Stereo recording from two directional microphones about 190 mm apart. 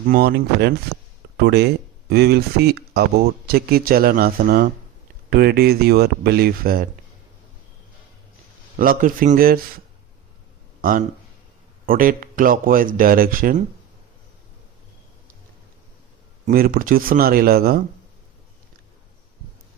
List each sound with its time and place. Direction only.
0.1 s speech: 55° right (ahead or behind)
1.4 s speech: 60° right (ahead or behind)
8.8 s speech: 45° right (ahead or behind)
10.8 s a sound: 45° right (ahead or behind)
11.9 s speech: 45° right (ahead or behind)
16.5 s speech: 50° right (ahead or behind)